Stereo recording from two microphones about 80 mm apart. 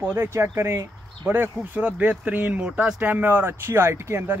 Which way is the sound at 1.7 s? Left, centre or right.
Centre.